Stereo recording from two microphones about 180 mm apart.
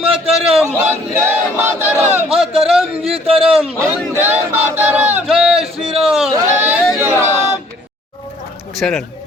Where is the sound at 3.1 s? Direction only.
30° right (ahead or behind).